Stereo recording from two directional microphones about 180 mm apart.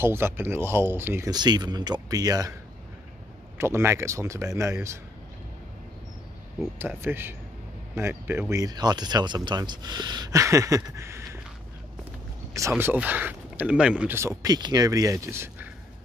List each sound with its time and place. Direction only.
0.0 s speech: 15° right (ahead or behind)
3.5 s speech: 15° right (ahead or behind)
6.8 s speech: 10° right (ahead or behind)
12.5 s speech: 15° right (ahead or behind)